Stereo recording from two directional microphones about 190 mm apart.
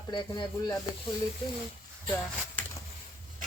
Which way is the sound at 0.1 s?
25° left (ahead or behind).